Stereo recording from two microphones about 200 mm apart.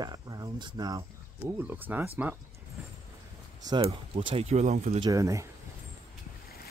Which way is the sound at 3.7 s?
30° right (ahead or behind).